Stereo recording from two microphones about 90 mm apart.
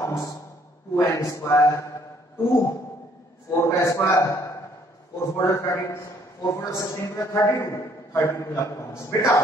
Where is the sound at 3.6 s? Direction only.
35° left (ahead or behind).